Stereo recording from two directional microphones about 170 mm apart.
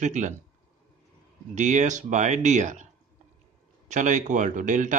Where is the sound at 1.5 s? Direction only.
45° right (ahead or behind).